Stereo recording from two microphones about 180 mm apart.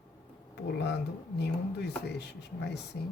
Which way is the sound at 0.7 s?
70° left (ahead or behind).